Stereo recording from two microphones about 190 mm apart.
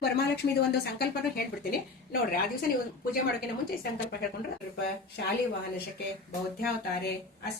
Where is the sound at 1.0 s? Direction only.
55° left (ahead or behind).